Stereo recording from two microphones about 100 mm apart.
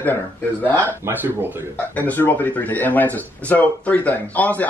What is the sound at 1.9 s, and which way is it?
Speech, 20° left (ahead or behind).